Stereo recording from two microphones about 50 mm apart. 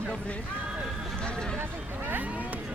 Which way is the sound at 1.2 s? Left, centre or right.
Centre.